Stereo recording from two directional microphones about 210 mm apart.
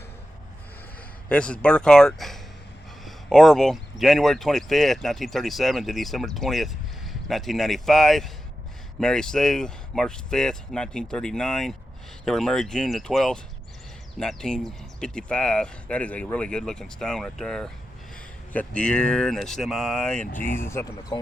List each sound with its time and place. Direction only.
1.3 s speech: 5° left (ahead or behind)